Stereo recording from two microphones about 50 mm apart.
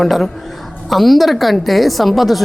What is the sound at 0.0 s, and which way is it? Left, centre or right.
A woman's voice, centre.